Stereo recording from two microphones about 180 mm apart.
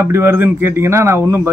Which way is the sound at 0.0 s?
15° right (ahead or behind).